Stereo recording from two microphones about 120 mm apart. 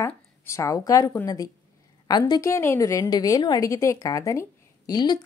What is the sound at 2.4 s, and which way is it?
A woman's voice, 25° left (ahead or behind).